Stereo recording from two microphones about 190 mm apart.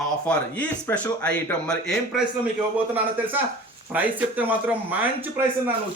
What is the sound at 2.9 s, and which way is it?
Speech, 10° right (ahead or behind).